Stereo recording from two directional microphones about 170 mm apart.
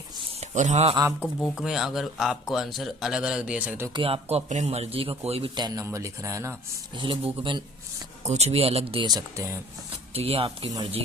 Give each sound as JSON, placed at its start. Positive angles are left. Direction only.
{"t": 0.3, "sound": "a man's voice", "side_deg": -45}
{"t": 1.5, "sound": "speech", "side_deg": 0}
{"t": 3.9, "sound": "a man's voice", "side_deg": -35}
{"t": 7.0, "sound": "speech", "side_deg": -30}
{"t": 8.2, "sound": "a man's voice", "side_deg": -40}
{"t": 10.2, "sound": "a man's voice", "side_deg": -35}